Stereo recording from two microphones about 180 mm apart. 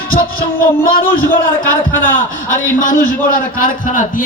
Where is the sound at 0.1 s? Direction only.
55° left (ahead or behind).